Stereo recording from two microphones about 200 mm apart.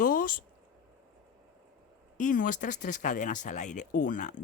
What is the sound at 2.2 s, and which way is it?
Speech, 40° left (ahead or behind).